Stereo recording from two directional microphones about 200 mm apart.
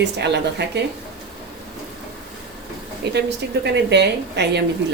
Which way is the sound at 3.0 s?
55° right (ahead or behind).